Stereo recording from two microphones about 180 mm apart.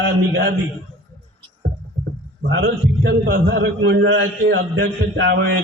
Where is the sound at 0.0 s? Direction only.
70° right (ahead or behind).